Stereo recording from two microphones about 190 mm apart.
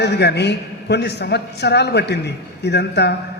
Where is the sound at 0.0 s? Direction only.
60° left (ahead or behind).